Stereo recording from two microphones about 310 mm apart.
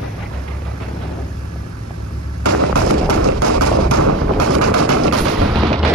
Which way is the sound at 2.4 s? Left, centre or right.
Right.